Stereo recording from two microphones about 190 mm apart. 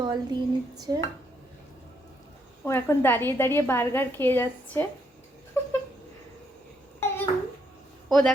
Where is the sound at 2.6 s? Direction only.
10° left (ahead or behind).